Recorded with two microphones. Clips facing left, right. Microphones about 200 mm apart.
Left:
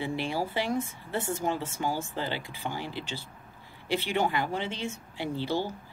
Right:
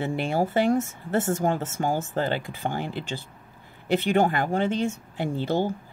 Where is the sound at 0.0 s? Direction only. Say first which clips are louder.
Right 5 dB; 50° right (ahead or behind).